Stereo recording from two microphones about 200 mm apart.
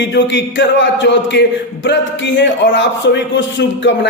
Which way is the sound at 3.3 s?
65° left (ahead or behind).